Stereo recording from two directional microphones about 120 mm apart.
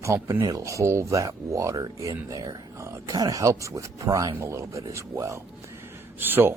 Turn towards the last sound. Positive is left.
turn(degrees=-15)  # may be behind; listen again after turning